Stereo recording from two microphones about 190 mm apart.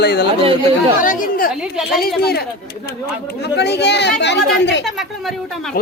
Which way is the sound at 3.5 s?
60° left (ahead or behind).